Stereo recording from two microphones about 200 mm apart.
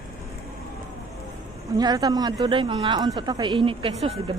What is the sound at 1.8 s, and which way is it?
A woman's voice, 20° right (ahead or behind).